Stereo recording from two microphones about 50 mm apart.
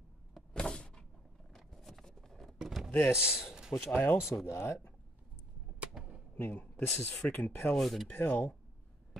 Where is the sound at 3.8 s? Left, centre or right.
Left.